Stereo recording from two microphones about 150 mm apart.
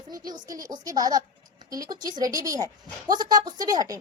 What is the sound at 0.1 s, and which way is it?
A woman's voice, 25° right (ahead or behind).